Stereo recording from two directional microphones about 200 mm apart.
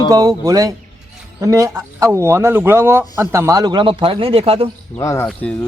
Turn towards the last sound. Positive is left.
turn(degrees=5)  # may be behind; listen again after turning